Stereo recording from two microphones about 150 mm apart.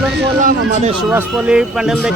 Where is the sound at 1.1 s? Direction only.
10° right (ahead or behind).